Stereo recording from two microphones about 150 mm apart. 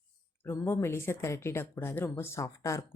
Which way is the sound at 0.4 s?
15° left (ahead or behind).